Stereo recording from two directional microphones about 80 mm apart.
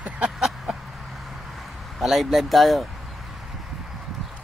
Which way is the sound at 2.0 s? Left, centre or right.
Centre.